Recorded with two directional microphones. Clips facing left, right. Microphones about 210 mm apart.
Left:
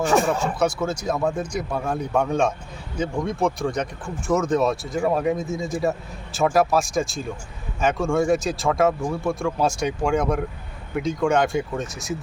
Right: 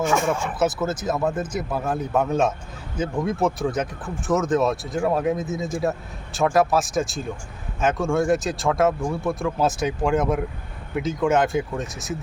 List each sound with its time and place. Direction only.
0.0 s speech: 35° left (ahead or behind)
0.6 s speech: 5° right (ahead or behind)